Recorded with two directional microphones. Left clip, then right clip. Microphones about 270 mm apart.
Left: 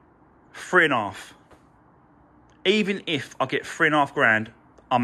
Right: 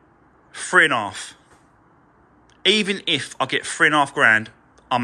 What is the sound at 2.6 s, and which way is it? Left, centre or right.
Speech, centre.